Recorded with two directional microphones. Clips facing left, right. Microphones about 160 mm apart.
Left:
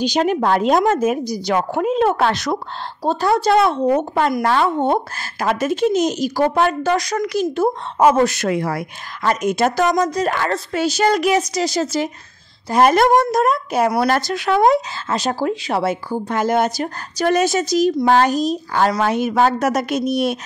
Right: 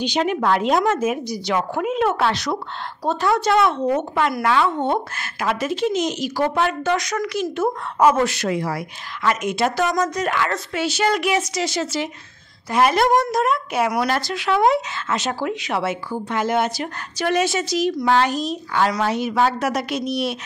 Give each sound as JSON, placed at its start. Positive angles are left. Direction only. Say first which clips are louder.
{"t": 0.0, "sound": "speech", "louder": "left 3 dB", "side_deg": 40}
{"t": 2.2, "sound": "a woman's voice", "louder": "left 3 dB", "side_deg": 45}
{"t": 3.0, "sound": "speech", "louder": "left 3 dB", "side_deg": 35}
{"t": 8.3, "sound": "speech", "louder": "left 3 dB", "side_deg": 50}
{"t": 9.2, "sound": "a woman's voice", "louder": "left 3 dB", "side_deg": 40}